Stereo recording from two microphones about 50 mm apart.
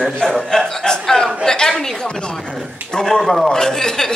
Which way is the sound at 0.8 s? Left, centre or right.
Centre.